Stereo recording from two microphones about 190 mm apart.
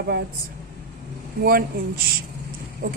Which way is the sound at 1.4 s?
50° right (ahead or behind).